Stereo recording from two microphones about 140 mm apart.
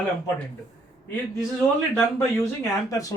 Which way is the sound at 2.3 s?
20° left (ahead or behind).